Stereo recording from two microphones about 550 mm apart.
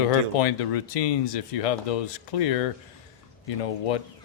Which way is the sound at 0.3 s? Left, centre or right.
Left.